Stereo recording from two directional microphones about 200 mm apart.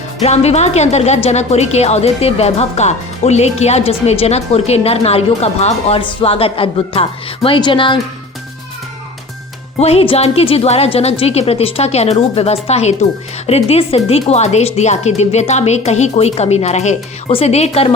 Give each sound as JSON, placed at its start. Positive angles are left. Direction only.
{"t": 0.2, "sound": "speech", "side_deg": 35}
{"t": 9.7, "sound": "speech", "side_deg": 30}